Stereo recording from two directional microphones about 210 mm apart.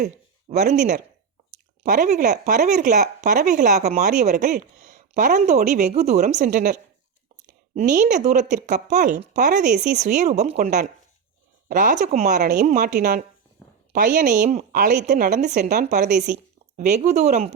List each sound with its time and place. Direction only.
0.0 s speech: 35° right (ahead or behind)
7.8 s a woman's voice: 35° right (ahead or behind)